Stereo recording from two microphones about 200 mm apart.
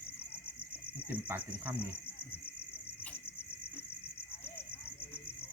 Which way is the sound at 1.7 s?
25° left (ahead or behind).